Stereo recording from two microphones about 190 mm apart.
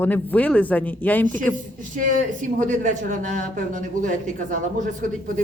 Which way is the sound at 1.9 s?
45° right (ahead or behind).